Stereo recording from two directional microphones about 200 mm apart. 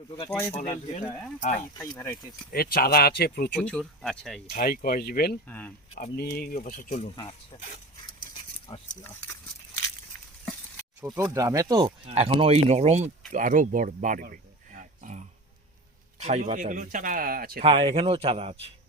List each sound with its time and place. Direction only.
0.3 s speech: 10° left (ahead or behind)
0.6 s speech: 35° left (ahead or behind)
1.8 s speech: 15° left (ahead or behind)
2.5 s speech: 50° left (ahead or behind)
3.6 s speech: 5° left (ahead or behind)
4.5 s speech: 45° left (ahead or behind)
5.5 s speech: 10° left (ahead or behind)
5.9 s speech: 50° left (ahead or behind)
7.2 s speech: 20° left (ahead or behind)
8.7 s speech: 20° left (ahead or behind)
11.0 s speech: 15° right (ahead or behind); by 15.2 s 40° right (ahead or behind)
16.2 s speech: 35° right (ahead or behind)
17.6 s a man's voice: 30° right (ahead or behind)